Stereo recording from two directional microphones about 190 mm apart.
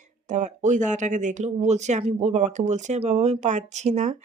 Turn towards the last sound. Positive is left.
turn(degrees=-35)  # may be behind; listen again after turning